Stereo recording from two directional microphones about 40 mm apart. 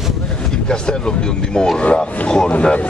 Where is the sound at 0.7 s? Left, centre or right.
Left.